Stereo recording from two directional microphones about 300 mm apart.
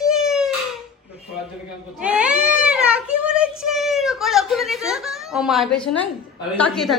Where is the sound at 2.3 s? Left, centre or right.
Right.